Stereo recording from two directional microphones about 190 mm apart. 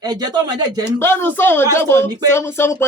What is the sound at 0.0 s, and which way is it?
Speech, 20° right (ahead or behind).